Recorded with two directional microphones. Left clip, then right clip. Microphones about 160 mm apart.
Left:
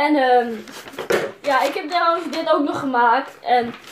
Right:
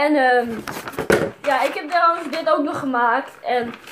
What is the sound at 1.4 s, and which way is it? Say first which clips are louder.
A woman's voice: left 1 dB; 5° left (ahead or behind).